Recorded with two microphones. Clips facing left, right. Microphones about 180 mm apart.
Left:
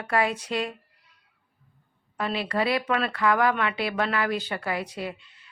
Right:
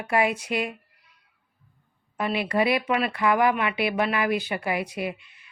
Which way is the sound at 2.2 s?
15° right (ahead or behind).